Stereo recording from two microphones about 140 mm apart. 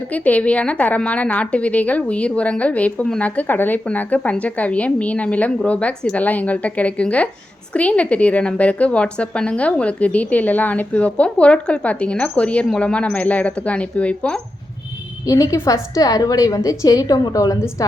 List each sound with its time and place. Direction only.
0.1 s a woman's voice: 10° left (ahead or behind)
15.3 s a woman's voice: 25° left (ahead or behind)